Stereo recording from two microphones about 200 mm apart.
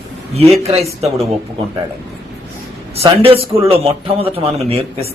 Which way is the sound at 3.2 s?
25° right (ahead or behind).